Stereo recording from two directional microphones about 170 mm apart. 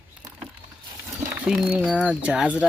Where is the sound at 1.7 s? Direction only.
5° right (ahead or behind).